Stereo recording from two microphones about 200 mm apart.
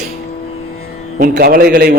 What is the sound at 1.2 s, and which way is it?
Speech, 45° right (ahead or behind).